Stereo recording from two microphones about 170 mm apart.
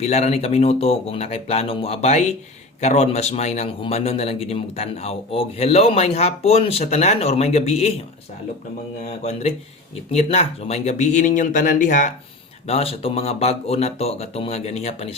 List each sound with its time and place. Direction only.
0.0 s a man's voice: 40° left (ahead or behind)
9.0 s a man's voice: 40° left (ahead or behind)
12.6 s a man's voice: 35° left (ahead or behind)